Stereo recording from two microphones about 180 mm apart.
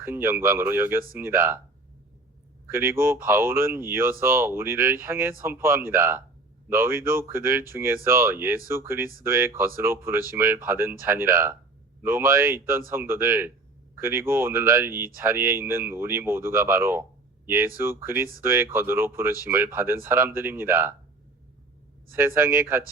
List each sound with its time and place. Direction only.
0.0 s speech: 15° right (ahead or behind)
2.6 s speech: 15° right (ahead or behind)
7.0 s speech: 50° right (ahead or behind)
7.3 s speech: 15° right (ahead or behind)
22.4 s speech: 15° right (ahead or behind)